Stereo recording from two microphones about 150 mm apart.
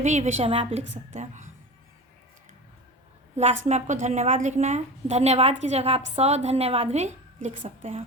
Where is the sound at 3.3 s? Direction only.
50° right (ahead or behind).